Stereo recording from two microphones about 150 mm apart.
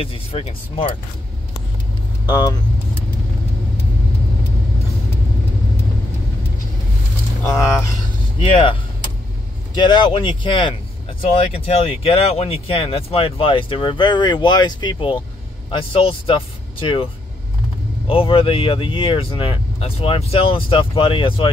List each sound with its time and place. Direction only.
0.0 s speech: 40° left (ahead or behind)
2.2 s speech: 30° left (ahead or behind)
9.8 s speech: 30° left (ahead or behind)